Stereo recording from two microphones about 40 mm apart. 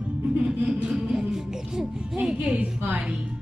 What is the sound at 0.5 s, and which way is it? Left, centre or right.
Speech, centre.